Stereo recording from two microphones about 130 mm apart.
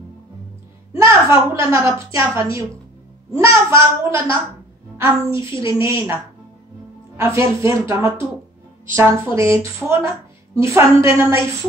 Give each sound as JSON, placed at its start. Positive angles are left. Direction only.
{"t": 0.9, "sound": "a woman's voice", "side_deg": -25}